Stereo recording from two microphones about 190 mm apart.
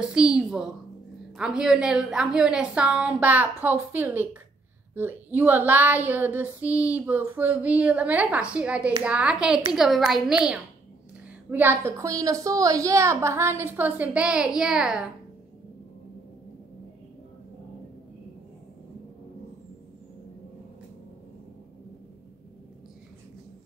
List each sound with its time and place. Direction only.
0.0 s a woman's voice: 5° right (ahead or behind)